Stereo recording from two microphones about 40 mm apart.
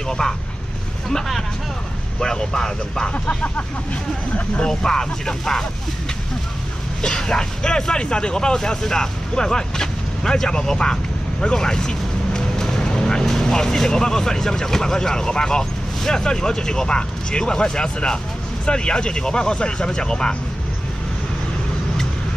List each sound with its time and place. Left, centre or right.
0.2 s speech: centre
2.1 s speech: centre
4.6 s speech: centre
7.0 s speech: centre